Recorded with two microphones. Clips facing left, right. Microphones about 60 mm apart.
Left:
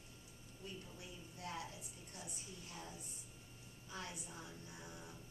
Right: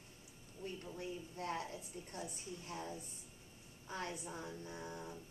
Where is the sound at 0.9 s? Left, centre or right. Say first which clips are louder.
Right 9 dB; right.